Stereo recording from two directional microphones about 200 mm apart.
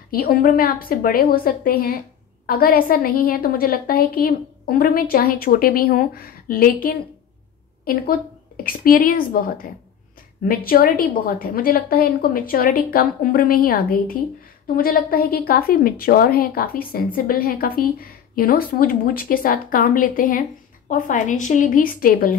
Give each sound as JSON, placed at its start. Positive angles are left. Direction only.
{"t": 0.1, "sound": "a woman's voice", "side_deg": 45}